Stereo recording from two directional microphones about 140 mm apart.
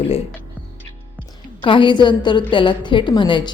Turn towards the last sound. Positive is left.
turn(degrees=35)  # may be behind; listen again after turning